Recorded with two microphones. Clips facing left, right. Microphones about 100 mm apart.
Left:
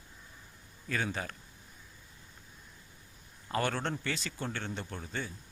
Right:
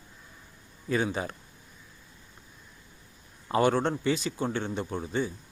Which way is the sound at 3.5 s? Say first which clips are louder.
Right 8 dB; 20° right (ahead or behind).